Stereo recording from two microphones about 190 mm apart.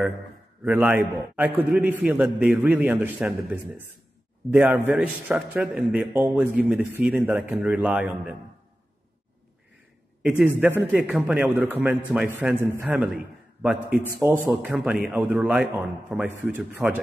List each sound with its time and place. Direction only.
0.7 s a man's voice: 10° right (ahead or behind)
4.5 s a man's voice: 10° right (ahead or behind)
10.2 s a man's voice: 10° right (ahead or behind)